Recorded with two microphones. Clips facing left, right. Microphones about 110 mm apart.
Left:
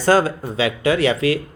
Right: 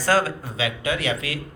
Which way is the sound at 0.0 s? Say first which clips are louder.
Left 5 dB; 25° left (ahead or behind).